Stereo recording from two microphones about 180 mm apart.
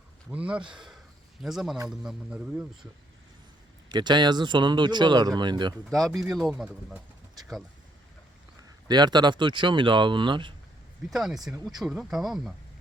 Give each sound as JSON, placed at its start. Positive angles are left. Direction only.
{"t": 0.3, "sound": "speech", "side_deg": -5}
{"t": 3.8, "sound": "speech", "side_deg": -25}
{"t": 5.9, "sound": "speech", "side_deg": 0}
{"t": 8.9, "sound": "speech", "side_deg": -25}
{"t": 11.1, "sound": "speech", "side_deg": 0}